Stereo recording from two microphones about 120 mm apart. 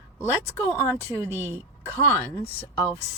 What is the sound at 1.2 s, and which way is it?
Speech, 20° right (ahead or behind).